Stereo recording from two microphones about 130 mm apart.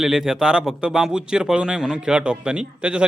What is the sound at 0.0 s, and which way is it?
Speech, 5° right (ahead or behind).